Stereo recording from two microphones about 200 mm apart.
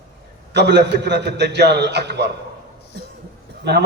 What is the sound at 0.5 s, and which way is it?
A man's voice, 60° right (ahead or behind).